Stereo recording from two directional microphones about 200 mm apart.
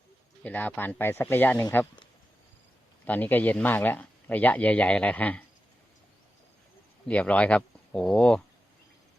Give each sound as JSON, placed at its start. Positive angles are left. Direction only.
{"t": 0.4, "sound": "speech", "side_deg": 10}
{"t": 3.1, "sound": "speech", "side_deg": 10}
{"t": 7.1, "sound": "speech", "side_deg": 5}